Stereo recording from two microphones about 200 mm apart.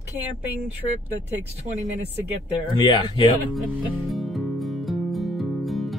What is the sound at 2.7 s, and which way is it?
Speech, 25° left (ahead or behind).